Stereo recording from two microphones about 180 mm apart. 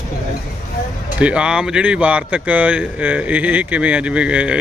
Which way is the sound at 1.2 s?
5° right (ahead or behind).